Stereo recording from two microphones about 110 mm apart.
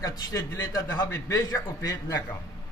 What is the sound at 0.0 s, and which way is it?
A man's voice, 35° left (ahead or behind).